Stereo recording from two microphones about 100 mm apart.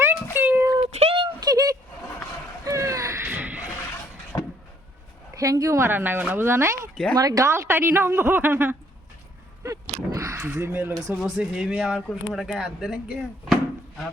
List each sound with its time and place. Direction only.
0.0 s a sound: 25° right (ahead or behind)
0.9 s a sound: 90° right
1.2 s a sound: 45° right (ahead or behind)
3.2 s music: 15° right (ahead or behind)
4.3 s vehicle: 35° left (ahead or behind)
5.3 s a woman's voice: 35° right (ahead or behind)
5.9 s a woman's voice: 20° right (ahead or behind)
6.9 s speech: 10° left (ahead or behind)
7.2 s a woman's voice: 35° right (ahead or behind); by 8.7 s 20° right (ahead or behind)
9.6 s crow: 35° right (ahead or behind)
11.2 s speech: 5° right (ahead or behind)